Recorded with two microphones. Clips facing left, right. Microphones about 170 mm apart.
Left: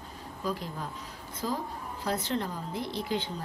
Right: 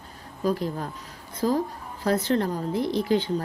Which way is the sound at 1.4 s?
60° right (ahead or behind).